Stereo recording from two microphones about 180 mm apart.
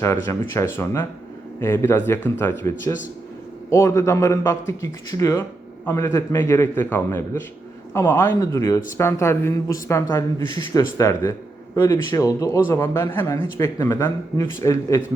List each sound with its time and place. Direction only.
0.0 s speech: 15° left (ahead or behind)